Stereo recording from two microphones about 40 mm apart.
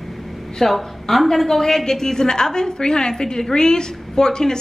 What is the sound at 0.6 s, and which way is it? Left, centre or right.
A woman's voice, centre.